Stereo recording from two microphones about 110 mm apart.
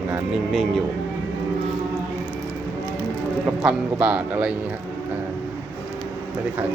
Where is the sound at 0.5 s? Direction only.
Centre (ahead or behind).